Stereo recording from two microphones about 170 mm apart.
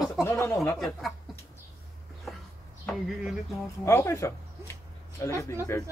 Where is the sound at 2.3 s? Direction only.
Centre (ahead or behind).